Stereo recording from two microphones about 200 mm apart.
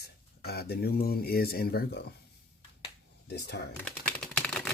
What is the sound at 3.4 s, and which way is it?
Speech, 55° left (ahead or behind).